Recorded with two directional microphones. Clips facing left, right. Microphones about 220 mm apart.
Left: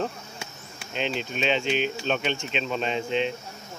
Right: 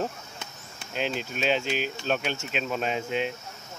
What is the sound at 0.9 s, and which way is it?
Speech, 5° right (ahead or behind).